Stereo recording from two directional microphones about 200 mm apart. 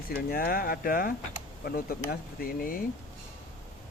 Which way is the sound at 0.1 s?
50° left (ahead or behind).